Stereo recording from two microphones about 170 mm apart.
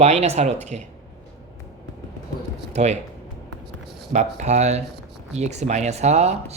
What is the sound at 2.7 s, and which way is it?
Speech, 40° right (ahead or behind).